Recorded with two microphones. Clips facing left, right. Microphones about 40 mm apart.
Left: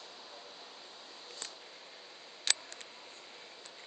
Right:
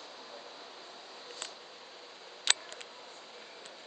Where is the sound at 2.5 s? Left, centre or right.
Right.